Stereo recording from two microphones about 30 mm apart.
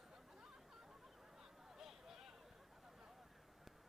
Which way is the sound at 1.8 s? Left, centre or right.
Centre.